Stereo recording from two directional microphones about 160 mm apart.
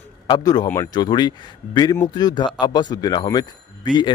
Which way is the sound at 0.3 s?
25° left (ahead or behind).